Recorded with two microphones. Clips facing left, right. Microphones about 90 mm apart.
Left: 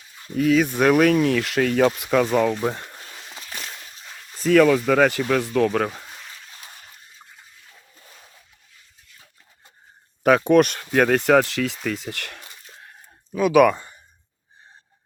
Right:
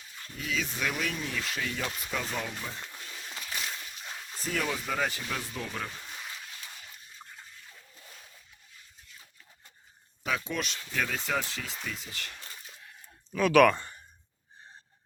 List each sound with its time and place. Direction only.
0.3 s speech: 60° left (ahead or behind)
4.0 s a sound: 5° right (ahead or behind)
4.4 s speech: 90° left; by 6.0 s 65° left (ahead or behind)
10.2 s speech: 60° left (ahead or behind)
13.3 s speech: 10° left (ahead or behind)